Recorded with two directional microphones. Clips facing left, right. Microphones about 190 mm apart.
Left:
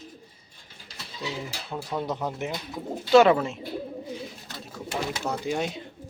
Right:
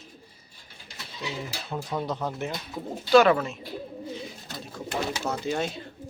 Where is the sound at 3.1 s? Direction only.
25° left (ahead or behind).